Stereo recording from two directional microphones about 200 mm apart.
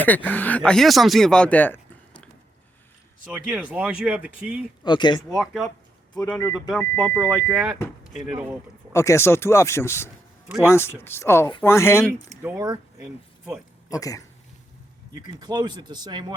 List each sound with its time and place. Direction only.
0.0 s speech: 10° left (ahead or behind)
3.2 s speech: 10° right (ahead or behind)
4.8 s speech: 20° left (ahead or behind)
5.3 s speech: centre (ahead or behind)
8.9 s speech: 15° left (ahead or behind)
12.4 s speech: 10° right (ahead or behind)
13.0 s speech: 5° right (ahead or behind)
13.9 s speech: 15° left (ahead or behind)
15.1 s speech: 20° right (ahead or behind)